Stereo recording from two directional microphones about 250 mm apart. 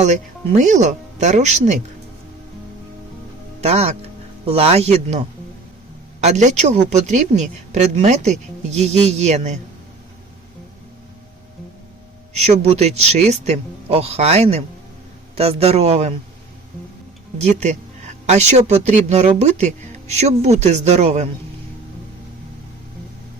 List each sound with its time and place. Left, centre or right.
0.0 s speech: right
3.6 s speech: right
12.4 s speech: right
17.3 s speech: right